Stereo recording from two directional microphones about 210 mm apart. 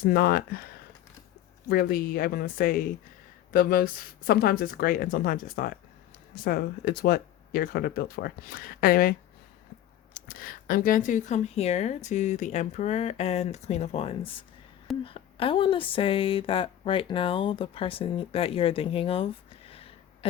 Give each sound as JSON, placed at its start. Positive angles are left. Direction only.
{"t": 0.0, "sound": "speech", "side_deg": 45}
{"t": 1.7, "sound": "speech", "side_deg": 45}
{"t": 10.2, "sound": "speech", "side_deg": 45}